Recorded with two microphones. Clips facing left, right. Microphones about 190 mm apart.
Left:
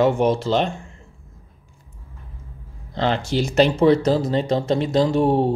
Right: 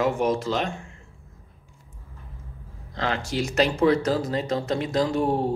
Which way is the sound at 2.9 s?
30° left (ahead or behind).